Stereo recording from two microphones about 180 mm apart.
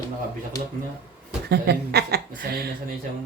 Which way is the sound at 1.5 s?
65° right (ahead or behind).